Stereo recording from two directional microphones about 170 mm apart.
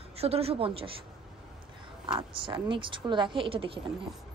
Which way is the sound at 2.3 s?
30° right (ahead or behind).